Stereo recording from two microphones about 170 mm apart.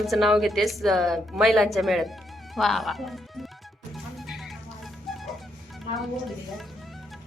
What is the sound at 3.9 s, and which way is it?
Music, centre (ahead or behind).